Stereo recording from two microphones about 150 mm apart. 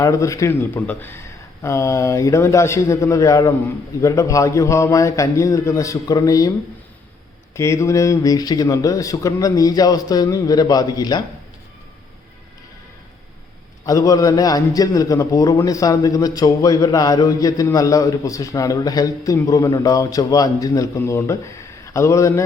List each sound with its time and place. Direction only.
0.0 s a man's voice: 20° left (ahead or behind)
7.5 s a man's voice: 20° left (ahead or behind)
13.8 s a man's voice: 20° left (ahead or behind)